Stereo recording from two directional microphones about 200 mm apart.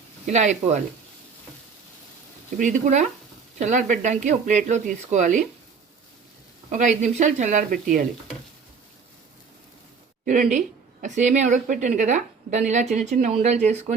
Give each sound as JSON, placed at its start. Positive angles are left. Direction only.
{"t": 0.3, "sound": "a woman's voice", "side_deg": -35}
{"t": 2.6, "sound": "a woman's voice", "side_deg": -40}
{"t": 6.7, "sound": "a woman's voice", "side_deg": -40}
{"t": 10.2, "sound": "a woman's voice", "side_deg": -40}